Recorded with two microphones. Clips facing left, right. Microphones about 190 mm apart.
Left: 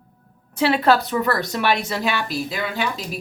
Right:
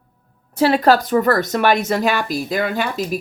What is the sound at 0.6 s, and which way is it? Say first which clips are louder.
Speech: right 3 dB; 40° right (ahead or behind).